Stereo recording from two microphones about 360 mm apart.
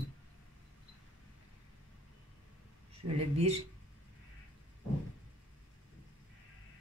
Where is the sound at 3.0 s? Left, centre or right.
Centre.